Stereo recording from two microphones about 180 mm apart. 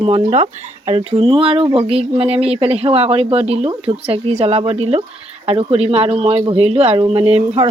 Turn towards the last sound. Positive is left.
turn(degrees=-35)  # may be behind; listen again after turning